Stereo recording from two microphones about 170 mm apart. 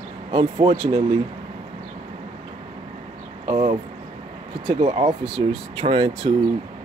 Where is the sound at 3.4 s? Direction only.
30° right (ahead or behind).